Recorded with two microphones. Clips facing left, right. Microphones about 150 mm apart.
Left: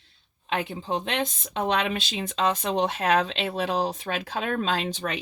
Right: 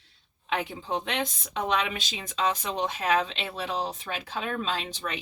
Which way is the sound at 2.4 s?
65° left (ahead or behind).